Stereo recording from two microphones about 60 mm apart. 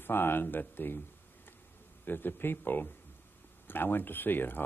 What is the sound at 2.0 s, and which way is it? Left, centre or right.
Speech, left.